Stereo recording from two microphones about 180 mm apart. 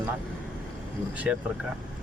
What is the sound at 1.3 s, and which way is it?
Speech, centre (ahead or behind).